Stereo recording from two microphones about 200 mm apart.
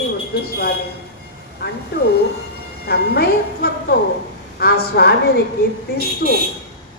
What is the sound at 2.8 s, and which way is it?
A woman's voice, 50° left (ahead or behind).